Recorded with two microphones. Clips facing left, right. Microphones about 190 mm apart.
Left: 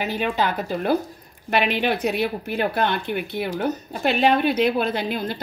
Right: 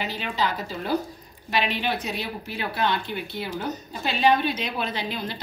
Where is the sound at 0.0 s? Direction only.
50° left (ahead or behind).